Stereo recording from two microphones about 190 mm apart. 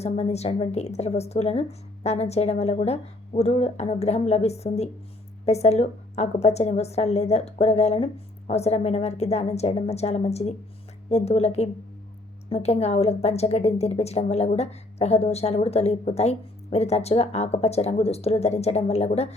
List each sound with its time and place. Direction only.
0.0 s a woman's voice: 35° left (ahead or behind)